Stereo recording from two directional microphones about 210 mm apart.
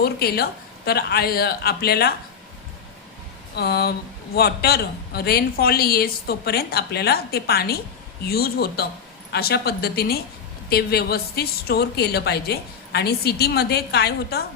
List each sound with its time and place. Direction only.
0.0 s a woman's voice: 50° left (ahead or behind)
3.5 s a woman's voice: 50° left (ahead or behind)